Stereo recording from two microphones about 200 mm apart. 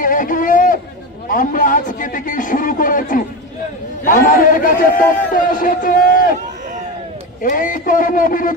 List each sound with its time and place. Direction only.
0.0 s a sound: 45° left (ahead or behind)
1.3 s a man's voice: 40° left (ahead or behind)
7.4 s a man's voice: 40° left (ahead or behind)